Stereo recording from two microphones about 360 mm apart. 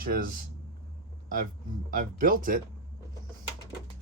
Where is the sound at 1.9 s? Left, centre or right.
Right.